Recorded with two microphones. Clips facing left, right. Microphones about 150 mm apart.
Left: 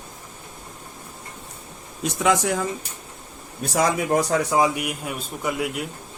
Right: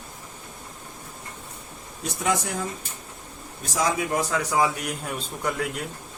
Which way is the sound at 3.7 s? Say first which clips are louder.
Left 4 dB; 55° left (ahead or behind).